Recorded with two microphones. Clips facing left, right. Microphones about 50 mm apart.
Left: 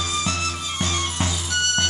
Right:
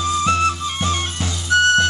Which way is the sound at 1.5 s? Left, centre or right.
Right.